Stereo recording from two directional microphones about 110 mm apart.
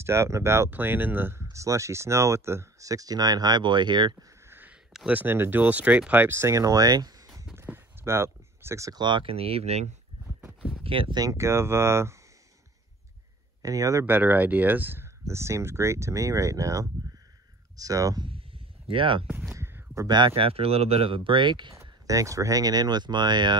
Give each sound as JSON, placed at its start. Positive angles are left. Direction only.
{"t": 0.0, "sound": "speech", "side_deg": -25}
{"t": 4.5, "sound": "a sound", "side_deg": -20}
{"t": 4.9, "sound": "speech", "side_deg": -10}
{"t": 7.5, "sound": "clip-clop", "side_deg": -20}
{"t": 9.0, "sound": "speech", "side_deg": -50}
{"t": 10.8, "sound": "speech", "side_deg": -55}
{"t": 11.1, "sound": "speech", "side_deg": -30}
{"t": 13.6, "sound": "speech", "side_deg": -30}
{"t": 14.0, "sound": "speech", "side_deg": -15}
{"t": 18.2, "sound": "a sound", "side_deg": -55}
{"t": 19.5, "sound": "a sound", "side_deg": -25}
{"t": 20.2, "sound": "speech", "side_deg": -55}
{"t": 21.7, "sound": "speech", "side_deg": -30}